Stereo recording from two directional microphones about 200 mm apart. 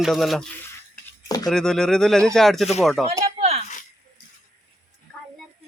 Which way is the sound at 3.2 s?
30° right (ahead or behind).